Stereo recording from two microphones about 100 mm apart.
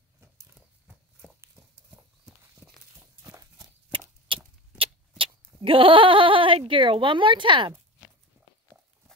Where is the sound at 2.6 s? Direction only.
10° right (ahead or behind).